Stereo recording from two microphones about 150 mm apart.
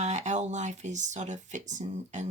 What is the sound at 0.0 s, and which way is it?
Speech, 50° right (ahead or behind).